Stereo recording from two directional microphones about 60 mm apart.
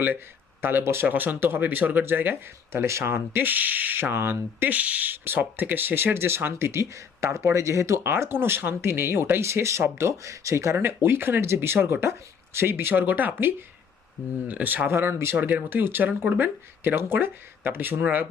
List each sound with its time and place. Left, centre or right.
0.6 s speech: right
1.0 s speech: right
3.3 s speech: right
4.7 s speech: right
8.0 s speech: right
10.8 s speech: right
14.8 s speech: right
15.4 s speech: right